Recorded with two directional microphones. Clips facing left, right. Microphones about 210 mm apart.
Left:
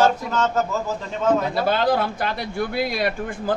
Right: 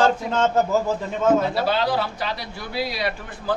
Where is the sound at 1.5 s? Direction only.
50° left (ahead or behind).